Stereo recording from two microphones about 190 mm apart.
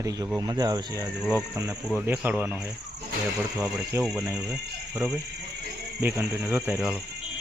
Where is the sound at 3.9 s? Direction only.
15° right (ahead or behind).